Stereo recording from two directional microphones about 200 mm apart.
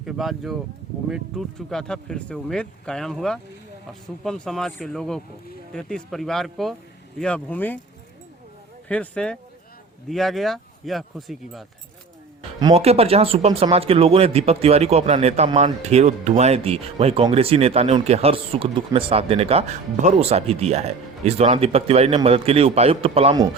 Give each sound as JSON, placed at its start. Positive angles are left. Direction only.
{"t": 0.0, "sound": "speech", "side_deg": 0}
{"t": 8.9, "sound": "speech", "side_deg": 5}
{"t": 12.4, "sound": "a sound", "side_deg": -25}
{"t": 12.8, "sound": "speech", "side_deg": -30}